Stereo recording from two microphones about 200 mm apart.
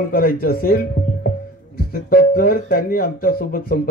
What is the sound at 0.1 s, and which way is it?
Speech, 50° left (ahead or behind).